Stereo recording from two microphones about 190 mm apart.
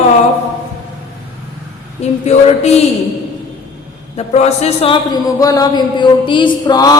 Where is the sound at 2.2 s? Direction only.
35° left (ahead or behind).